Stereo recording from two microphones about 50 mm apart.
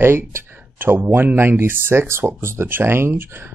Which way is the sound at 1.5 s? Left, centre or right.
Right.